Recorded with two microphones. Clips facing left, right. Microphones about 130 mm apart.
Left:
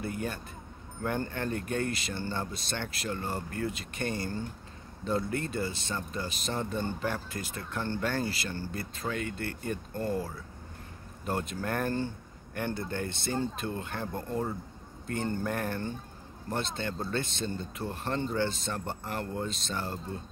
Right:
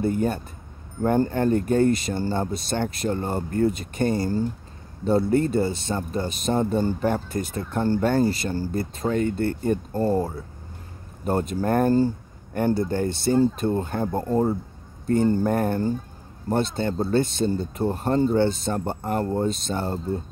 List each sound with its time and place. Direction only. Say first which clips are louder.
0.0 s speech: right 11 dB; 35° right (ahead or behind)